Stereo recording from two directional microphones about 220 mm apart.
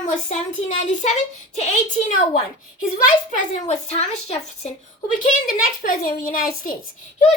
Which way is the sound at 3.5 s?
30° left (ahead or behind).